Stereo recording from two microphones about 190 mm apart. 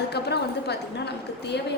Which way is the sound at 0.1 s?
60° left (ahead or behind).